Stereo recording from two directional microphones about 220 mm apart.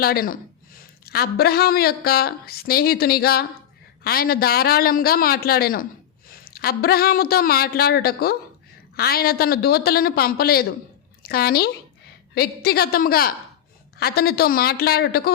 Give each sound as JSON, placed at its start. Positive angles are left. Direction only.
{"t": 0.0, "sound": "a woman's voice", "side_deg": 40}